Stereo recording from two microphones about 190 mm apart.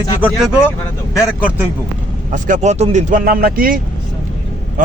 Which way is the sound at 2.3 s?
40° right (ahead or behind).